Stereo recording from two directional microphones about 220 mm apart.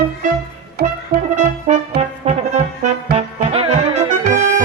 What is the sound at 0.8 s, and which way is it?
Music, 45° right (ahead or behind).